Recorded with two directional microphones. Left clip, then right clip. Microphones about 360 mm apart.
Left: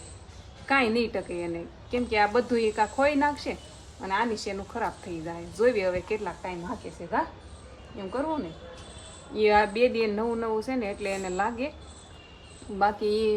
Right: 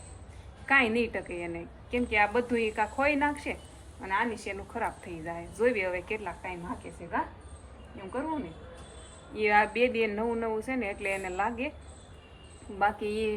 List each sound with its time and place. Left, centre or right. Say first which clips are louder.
0.7 s a woman's voice: left 1 dB; centre
9.4 s a woman's voice: left 3 dB; centre
12.8 s a woman's voice: left 4 dB; centre